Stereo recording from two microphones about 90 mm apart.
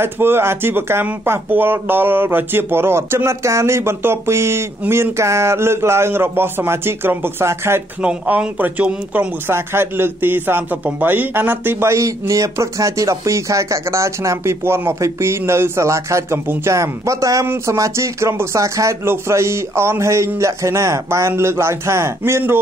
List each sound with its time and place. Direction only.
0.0 s speech: 25° right (ahead or behind)
8.0 s speech: 10° right (ahead or behind)
9.5 s a man's voice: 25° right (ahead or behind)